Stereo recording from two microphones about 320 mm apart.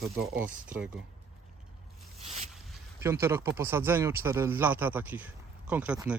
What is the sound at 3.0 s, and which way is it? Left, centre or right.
Speech, centre.